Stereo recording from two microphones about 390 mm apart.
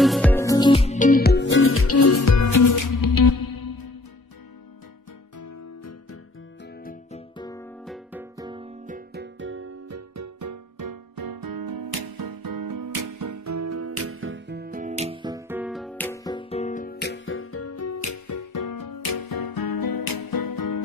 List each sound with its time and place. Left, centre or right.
0.0 s music: centre; by 3.9 s left
5.4 s music: left
6.6 s music: left